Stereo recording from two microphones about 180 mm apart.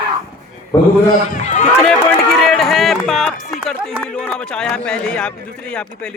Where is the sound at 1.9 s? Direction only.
Centre (ahead or behind).